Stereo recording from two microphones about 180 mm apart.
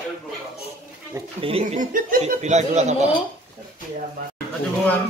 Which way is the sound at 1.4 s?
35° right (ahead or behind).